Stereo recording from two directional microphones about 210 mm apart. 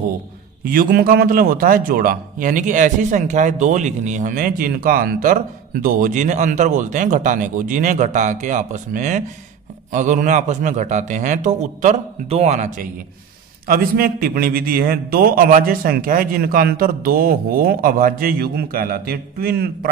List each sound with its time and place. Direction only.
0.7 s a man's voice: 45° right (ahead or behind)